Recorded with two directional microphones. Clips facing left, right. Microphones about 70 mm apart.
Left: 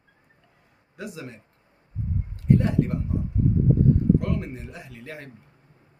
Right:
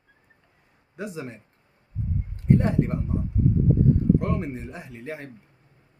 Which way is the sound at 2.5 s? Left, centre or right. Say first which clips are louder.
Even; right.